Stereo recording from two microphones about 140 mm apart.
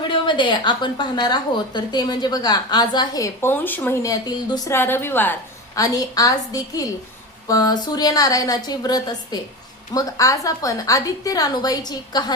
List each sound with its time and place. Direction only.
0.1 s a woman's voice: 35° left (ahead or behind); by 3.9 s 15° left (ahead or behind)
4.0 s a woman's voice: 25° left (ahead or behind)
5.7 s a woman's voice: 25° left (ahead or behind)